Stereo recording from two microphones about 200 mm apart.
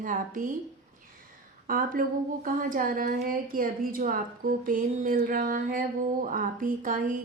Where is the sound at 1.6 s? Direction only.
45° right (ahead or behind).